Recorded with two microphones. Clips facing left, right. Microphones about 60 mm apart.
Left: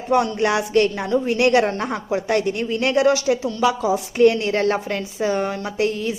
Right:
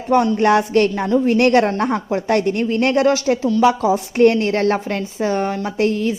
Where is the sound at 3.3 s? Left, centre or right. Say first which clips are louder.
Right 2 dB; centre.